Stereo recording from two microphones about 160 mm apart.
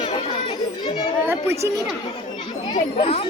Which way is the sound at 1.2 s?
15° right (ahead or behind).